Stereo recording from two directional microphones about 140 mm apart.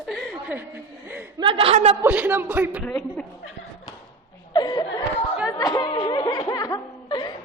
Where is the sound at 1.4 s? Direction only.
40° right (ahead or behind).